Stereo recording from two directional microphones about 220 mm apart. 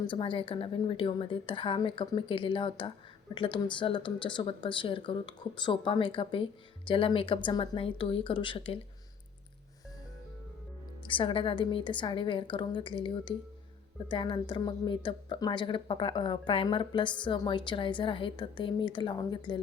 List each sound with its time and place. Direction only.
0.1 s speech: 25° left (ahead or behind)
11.0 s speech: 25° left (ahead or behind)